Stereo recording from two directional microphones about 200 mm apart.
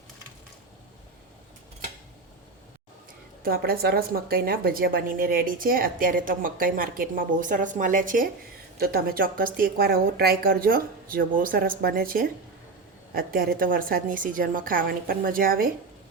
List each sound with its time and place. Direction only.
3.4 s a woman's voice: 50° right (ahead or behind)